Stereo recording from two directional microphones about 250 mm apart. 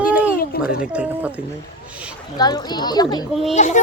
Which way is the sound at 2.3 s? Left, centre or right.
Centre.